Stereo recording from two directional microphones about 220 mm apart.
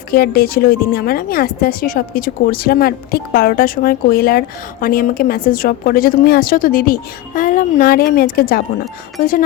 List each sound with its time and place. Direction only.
0.1 s speech: 45° left (ahead or behind)